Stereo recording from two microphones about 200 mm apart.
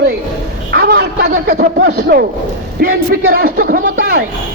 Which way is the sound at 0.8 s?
55° right (ahead or behind).